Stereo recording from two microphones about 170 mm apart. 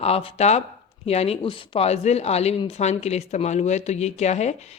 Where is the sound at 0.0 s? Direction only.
35° left (ahead or behind).